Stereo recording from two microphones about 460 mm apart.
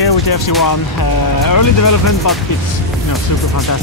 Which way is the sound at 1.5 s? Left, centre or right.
Left.